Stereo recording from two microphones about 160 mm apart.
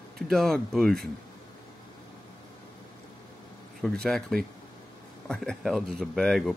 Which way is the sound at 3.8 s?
5° left (ahead or behind).